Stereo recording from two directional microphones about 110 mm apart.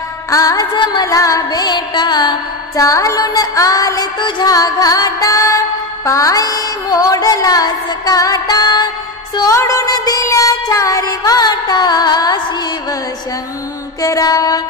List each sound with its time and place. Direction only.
0.3 s music: 30° left (ahead or behind)
1.0 s music: 30° left (ahead or behind)
14.0 s music: 30° left (ahead or behind)